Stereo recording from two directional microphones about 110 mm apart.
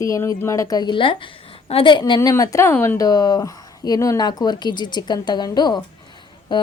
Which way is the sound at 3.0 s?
35° left (ahead or behind).